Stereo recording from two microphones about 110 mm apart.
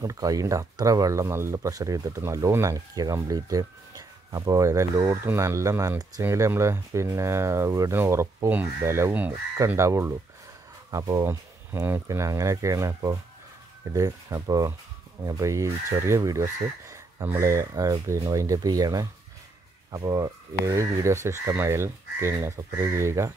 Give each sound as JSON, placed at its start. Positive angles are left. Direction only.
{"t": 0.0, "sound": "speech", "side_deg": -30}
{"t": 6.2, "sound": "speech", "side_deg": -25}
{"t": 9.8, "sound": "speech", "side_deg": -25}